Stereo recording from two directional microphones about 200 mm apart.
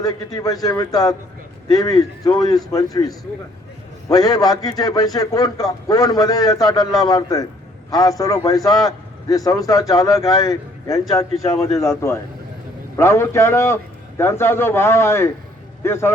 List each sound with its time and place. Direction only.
0.0 s a man's voice: 20° left (ahead or behind)